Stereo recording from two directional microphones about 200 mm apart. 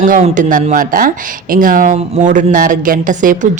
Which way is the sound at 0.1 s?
40° right (ahead or behind).